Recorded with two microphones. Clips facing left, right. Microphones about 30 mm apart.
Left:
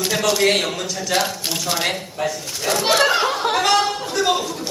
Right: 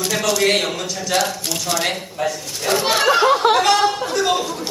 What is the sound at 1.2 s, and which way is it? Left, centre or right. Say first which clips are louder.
Speech: right 1 dB; centre.